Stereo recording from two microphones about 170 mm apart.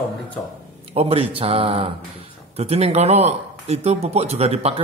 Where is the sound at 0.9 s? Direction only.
35° right (ahead or behind).